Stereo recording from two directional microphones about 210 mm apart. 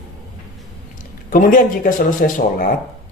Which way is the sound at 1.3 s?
40° left (ahead or behind).